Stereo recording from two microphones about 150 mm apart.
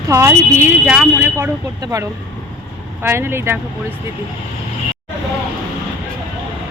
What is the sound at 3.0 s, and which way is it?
Speech, 15° right (ahead or behind).